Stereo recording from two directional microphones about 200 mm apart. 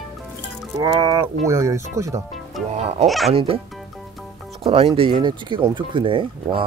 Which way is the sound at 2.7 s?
30° right (ahead or behind).